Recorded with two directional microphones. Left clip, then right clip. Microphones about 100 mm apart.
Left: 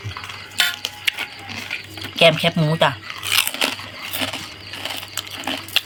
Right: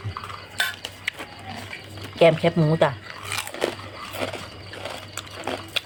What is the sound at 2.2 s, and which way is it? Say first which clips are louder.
Biting: left 2 dB; 30° right (ahead or behind).